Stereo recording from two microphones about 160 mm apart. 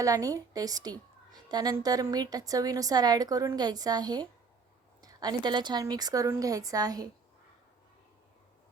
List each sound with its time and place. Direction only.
0.0 s a woman's voice: 20° right (ahead or behind)